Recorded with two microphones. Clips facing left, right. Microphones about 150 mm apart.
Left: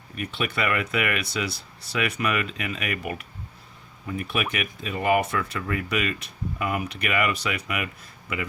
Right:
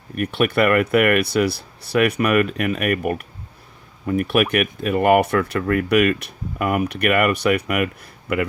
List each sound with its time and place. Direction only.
0.2 s speech: 60° right (ahead or behind)